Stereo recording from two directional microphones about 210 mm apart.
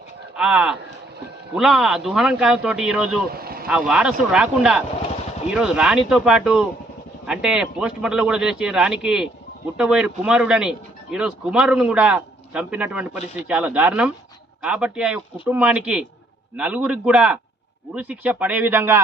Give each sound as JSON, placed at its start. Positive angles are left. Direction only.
{"t": 0.3, "sound": "speech", "side_deg": -5}
{"t": 3.3, "sound": "vehicle", "side_deg": -45}
{"t": 3.7, "sound": "speech", "side_deg": -5}